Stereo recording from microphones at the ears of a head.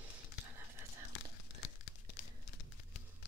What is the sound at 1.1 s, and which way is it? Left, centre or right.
Crumpling, left.